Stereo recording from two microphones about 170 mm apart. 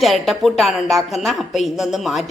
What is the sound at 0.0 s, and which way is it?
A woman's voice, centre (ahead or behind).